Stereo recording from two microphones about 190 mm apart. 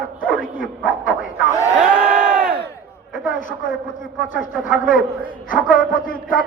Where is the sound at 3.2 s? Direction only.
45° left (ahead or behind).